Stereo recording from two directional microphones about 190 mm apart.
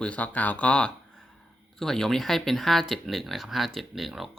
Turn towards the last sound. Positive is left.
turn(degrees=0)  # may be behind; listen again after turning